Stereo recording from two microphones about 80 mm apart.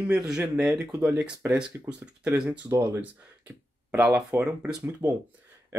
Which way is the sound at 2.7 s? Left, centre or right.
Right.